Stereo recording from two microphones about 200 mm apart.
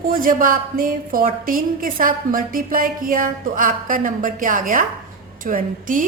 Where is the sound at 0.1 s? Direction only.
45° right (ahead or behind).